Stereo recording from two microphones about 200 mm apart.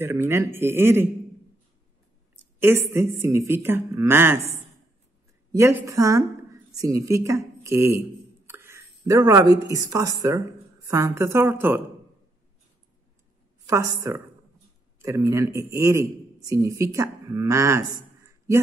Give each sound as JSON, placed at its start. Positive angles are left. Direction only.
{"t": 0.0, "sound": "speech", "side_deg": -10}
{"t": 2.6, "sound": "speech", "side_deg": -15}
{"t": 5.5, "sound": "a woman's voice", "side_deg": -15}
{"t": 13.7, "sound": "a man's voice", "side_deg": -15}